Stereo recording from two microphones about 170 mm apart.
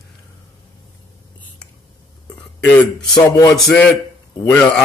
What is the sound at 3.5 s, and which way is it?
Speech, 5° left (ahead or behind).